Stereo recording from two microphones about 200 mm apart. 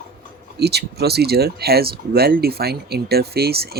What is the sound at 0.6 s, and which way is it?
Speech, 55° right (ahead or behind).